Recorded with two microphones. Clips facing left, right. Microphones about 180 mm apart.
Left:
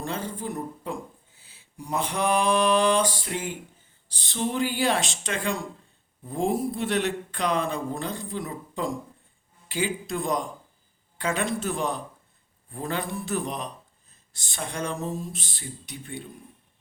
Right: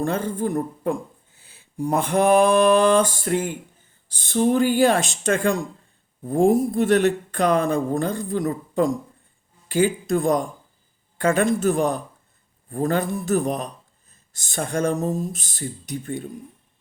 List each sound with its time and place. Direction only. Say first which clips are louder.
0.0 s speech: right 8 dB; 50° right (ahead or behind)